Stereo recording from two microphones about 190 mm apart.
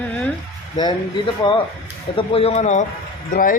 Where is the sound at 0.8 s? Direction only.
20° left (ahead or behind).